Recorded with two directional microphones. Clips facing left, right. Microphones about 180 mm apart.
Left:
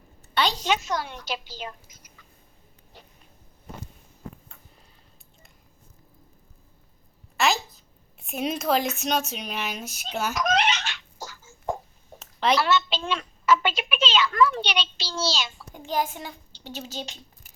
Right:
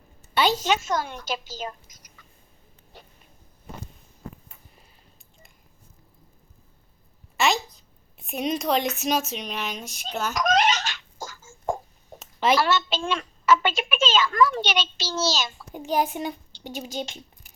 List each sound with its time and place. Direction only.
0.6 s a child's voice: 45° right (ahead or behind)
7.3 s a sound: centre (ahead or behind)
8.2 s speech: centre (ahead or behind)
10.3 s chicken: 40° right (ahead or behind)
12.2 s a sound: 5° right (ahead or behind)
12.5 s a child's voice: 45° right (ahead or behind)
15.7 s a child's voice: 15° right (ahead or behind)